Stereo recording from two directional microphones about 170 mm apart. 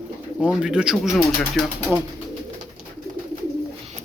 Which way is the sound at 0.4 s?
5° right (ahead or behind).